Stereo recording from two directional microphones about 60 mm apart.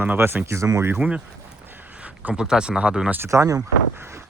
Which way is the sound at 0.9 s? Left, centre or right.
Centre.